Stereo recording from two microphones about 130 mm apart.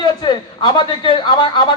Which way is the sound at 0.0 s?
35° left (ahead or behind).